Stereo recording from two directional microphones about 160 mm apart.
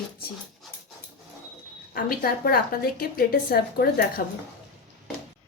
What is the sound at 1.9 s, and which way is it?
A woman's voice, 65° left (ahead or behind).